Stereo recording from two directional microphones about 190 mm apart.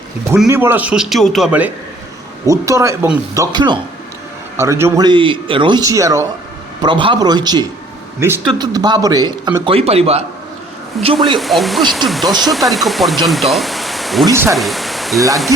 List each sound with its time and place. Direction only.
0.4 s a man's voice: 15° right (ahead or behind); by 10.2 s 30° right (ahead or behind)
11.0 s speech: centre (ahead or behind)
14.3 s a man's voice: 15° right (ahead or behind)
14.5 s pink noise: centre (ahead or behind)